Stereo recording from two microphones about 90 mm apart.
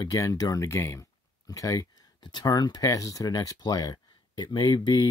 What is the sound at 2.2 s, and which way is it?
Speech, 55° left (ahead or behind).